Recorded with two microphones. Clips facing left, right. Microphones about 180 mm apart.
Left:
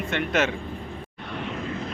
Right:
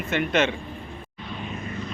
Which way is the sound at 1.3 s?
70° left (ahead or behind).